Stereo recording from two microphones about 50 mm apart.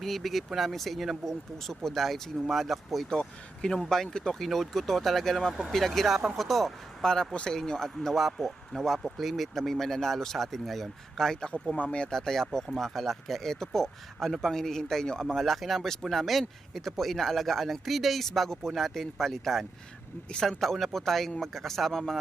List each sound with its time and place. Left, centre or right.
0.0 s speech: centre
3.1 s speech: centre
4.4 s speech: centre
7.0 s speech: centre
11.8 s speech: left
12.1 s speech: centre
15.4 s speech: centre